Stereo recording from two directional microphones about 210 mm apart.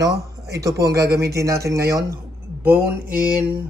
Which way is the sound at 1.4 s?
15° right (ahead or behind).